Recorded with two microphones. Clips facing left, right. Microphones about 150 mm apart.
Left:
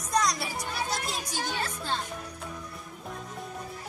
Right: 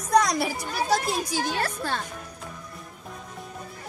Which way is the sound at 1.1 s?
75° right (ahead or behind).